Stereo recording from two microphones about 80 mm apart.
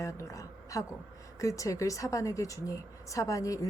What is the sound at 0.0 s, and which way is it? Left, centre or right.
A woman's voice, left.